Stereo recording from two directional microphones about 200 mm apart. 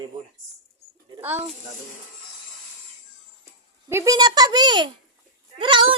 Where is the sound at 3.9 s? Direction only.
15° right (ahead or behind).